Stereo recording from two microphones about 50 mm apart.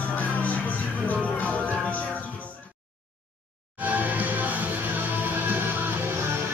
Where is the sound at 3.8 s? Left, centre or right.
Right.